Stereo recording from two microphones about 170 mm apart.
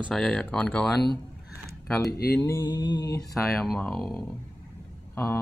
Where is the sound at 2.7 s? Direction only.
25° left (ahead or behind).